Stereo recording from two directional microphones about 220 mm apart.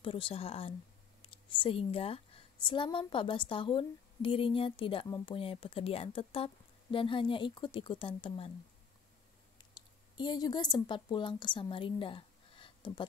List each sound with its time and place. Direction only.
0.0 s a woman's voice: 25° left (ahead or behind)
9.8 s a woman's voice: 20° left (ahead or behind)